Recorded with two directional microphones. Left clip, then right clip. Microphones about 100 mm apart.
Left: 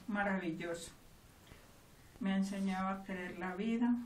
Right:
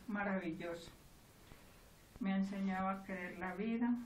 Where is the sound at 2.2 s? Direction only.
20° left (ahead or behind).